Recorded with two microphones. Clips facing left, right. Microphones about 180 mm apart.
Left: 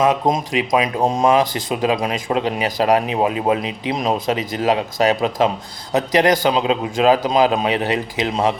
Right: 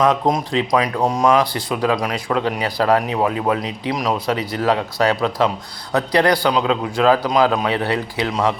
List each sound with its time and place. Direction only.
0.0 s speech: 20° left (ahead or behind)